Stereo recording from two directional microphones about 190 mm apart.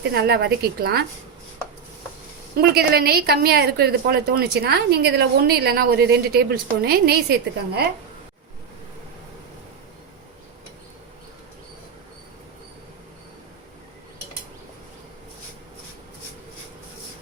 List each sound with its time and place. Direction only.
0.0 s a woman's voice: 60° right (ahead or behind)
2.6 s a woman's voice: 55° right (ahead or behind)